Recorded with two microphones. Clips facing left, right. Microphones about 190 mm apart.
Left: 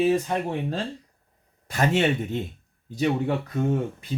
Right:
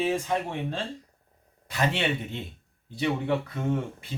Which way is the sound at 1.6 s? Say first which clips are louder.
Left 5 dB; 45° left (ahead or behind).